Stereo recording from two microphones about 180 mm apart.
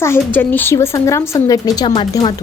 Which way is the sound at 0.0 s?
10° left (ahead or behind).